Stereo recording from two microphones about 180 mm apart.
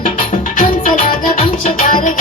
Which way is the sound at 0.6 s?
45° left (ahead or behind).